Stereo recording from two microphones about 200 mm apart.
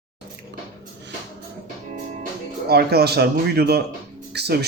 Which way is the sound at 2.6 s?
55° right (ahead or behind).